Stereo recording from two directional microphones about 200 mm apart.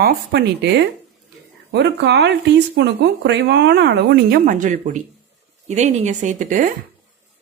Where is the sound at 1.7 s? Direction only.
55° right (ahead or behind); by 6.7 s 40° right (ahead or behind).